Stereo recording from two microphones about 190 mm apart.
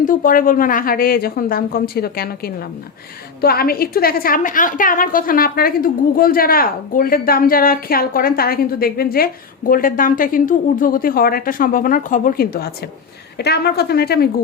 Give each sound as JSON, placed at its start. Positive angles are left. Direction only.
{"t": 0.0, "sound": "a woman's voice", "side_deg": 45}